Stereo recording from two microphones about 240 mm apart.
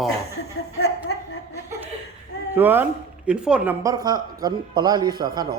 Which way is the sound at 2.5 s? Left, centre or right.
Centre.